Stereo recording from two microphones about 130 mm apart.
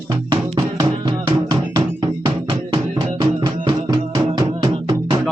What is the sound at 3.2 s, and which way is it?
Music, 35° right (ahead or behind).